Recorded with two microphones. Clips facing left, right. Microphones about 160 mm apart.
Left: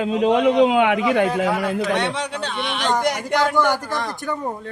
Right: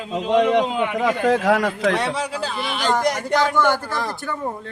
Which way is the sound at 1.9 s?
Centre (ahead or behind).